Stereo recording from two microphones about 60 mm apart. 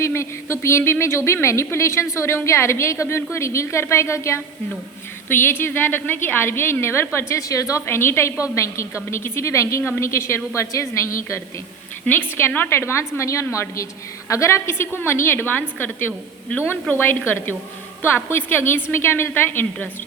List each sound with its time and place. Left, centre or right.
0.0 s speech: left
5.3 s a woman's voice: left
7.9 s speech: left
8.4 s speech: left
12.0 s a woman's voice: left
13.1 s a woman's voice: left
14.7 s a woman's voice: left